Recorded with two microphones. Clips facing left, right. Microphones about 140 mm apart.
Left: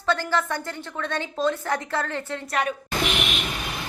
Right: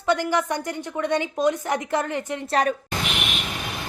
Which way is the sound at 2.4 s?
35° right (ahead or behind).